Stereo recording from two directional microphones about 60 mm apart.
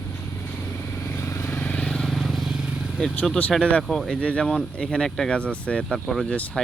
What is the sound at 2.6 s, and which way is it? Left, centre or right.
Vehicle, centre.